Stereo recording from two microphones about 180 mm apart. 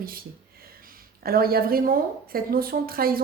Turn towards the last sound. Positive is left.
turn(degrees=-55)  # may be behind; listen again after turning